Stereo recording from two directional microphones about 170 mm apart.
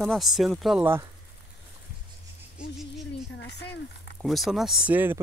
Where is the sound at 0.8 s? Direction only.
15° right (ahead or behind).